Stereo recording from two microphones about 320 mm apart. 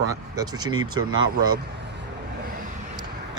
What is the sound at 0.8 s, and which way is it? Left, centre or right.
Speech, right.